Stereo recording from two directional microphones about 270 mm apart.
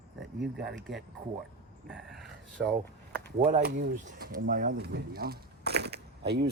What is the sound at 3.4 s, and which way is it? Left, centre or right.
Speech, right.